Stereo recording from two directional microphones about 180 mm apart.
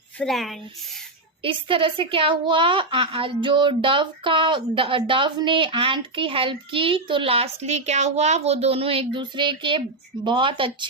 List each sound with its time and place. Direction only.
0.2 s speech: centre (ahead or behind)
1.4 s a woman's voice: 30° right (ahead or behind)